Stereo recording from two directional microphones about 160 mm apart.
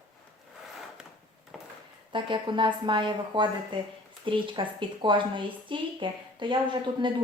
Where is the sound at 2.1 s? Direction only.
30° right (ahead or behind).